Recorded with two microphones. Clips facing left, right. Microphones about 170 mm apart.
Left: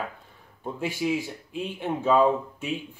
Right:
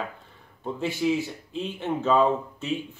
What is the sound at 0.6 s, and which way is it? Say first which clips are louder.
Speech: right 2 dB; 10° left (ahead or behind).